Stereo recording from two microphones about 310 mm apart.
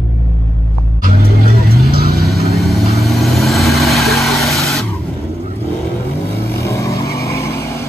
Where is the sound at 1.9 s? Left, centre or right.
Right.